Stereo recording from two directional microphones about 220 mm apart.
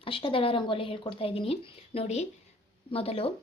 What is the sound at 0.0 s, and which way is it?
A woman's voice, 25° left (ahead or behind).